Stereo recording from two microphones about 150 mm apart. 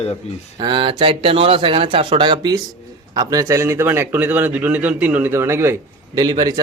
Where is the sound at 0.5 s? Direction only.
30° right (ahead or behind).